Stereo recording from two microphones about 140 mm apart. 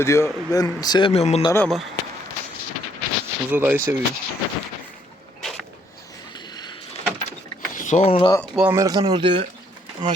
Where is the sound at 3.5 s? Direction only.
10° right (ahead or behind).